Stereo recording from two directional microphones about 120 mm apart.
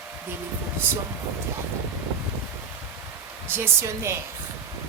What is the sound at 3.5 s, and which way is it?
Speech, 20° right (ahead or behind).